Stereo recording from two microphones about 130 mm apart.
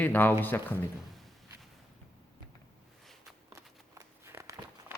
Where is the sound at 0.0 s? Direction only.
15° left (ahead or behind).